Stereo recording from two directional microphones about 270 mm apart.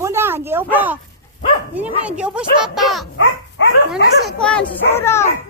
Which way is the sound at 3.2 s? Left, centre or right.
Left.